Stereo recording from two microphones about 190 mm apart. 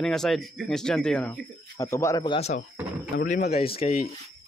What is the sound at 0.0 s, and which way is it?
Speech, centre (ahead or behind).